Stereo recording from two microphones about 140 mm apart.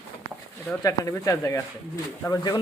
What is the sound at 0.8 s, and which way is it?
Speech, 25° left (ahead or behind).